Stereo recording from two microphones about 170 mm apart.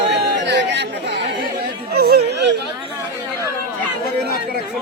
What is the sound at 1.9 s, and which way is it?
Yodeling, 70° right (ahead or behind).